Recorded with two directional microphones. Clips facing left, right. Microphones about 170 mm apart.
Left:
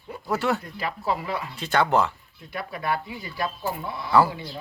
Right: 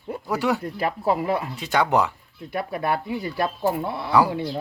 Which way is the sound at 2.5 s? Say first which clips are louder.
Right 4 dB; 50° right (ahead or behind).